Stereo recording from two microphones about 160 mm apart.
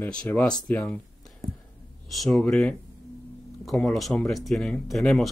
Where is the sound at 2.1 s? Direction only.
Centre (ahead or behind).